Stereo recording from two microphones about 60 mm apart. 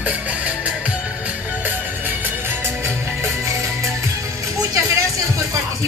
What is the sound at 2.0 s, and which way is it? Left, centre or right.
Music, right.